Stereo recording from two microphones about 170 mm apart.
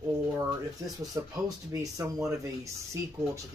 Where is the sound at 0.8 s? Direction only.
20° right (ahead or behind).